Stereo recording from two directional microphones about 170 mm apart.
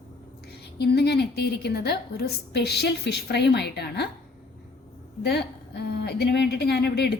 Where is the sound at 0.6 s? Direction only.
75° left (ahead or behind).